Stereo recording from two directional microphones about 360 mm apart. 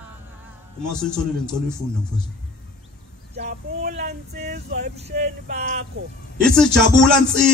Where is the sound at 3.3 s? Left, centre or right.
Right.